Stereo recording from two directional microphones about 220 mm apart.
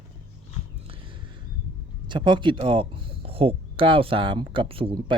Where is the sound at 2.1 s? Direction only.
20° right (ahead or behind).